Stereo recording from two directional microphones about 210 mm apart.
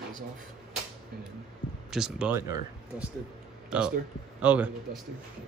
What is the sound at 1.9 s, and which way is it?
Speech, 5° right (ahead or behind).